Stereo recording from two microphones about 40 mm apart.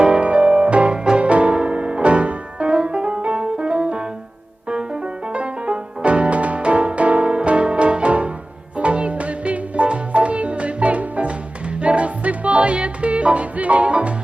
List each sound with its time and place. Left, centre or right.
0.0 s music: right
1.2 s piano: right
4.7 s music: right